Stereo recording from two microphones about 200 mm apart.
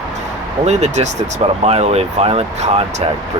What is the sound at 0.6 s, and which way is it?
Speech, 35° right (ahead or behind).